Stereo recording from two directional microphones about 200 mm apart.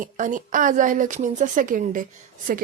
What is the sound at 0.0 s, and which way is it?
Speech, 40° right (ahead or behind).